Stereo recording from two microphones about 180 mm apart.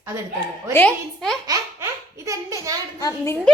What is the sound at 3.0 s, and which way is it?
Child singing, 20° left (ahead or behind).